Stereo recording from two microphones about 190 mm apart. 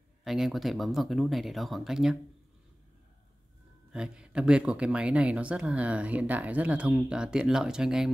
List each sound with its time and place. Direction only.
0.2 s speech: centre (ahead or behind)
3.9 s speech: 5° right (ahead or behind)